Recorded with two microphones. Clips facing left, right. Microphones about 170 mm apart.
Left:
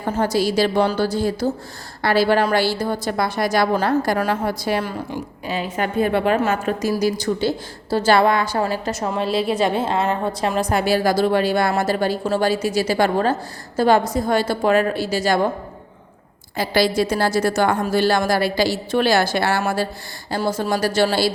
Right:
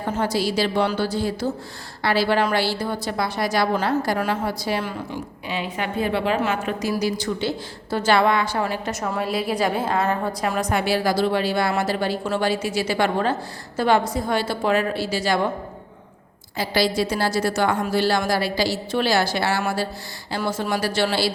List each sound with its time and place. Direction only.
0.0 s a woman's voice: 45° left (ahead or behind)
16.6 s a woman's voice: 50° left (ahead or behind)
20.3 s a woman's voice: 40° left (ahead or behind)